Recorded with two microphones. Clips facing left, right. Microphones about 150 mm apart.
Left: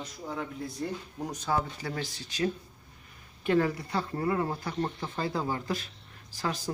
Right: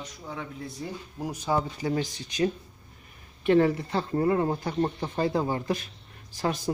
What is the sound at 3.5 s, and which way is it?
Speech, 25° right (ahead or behind).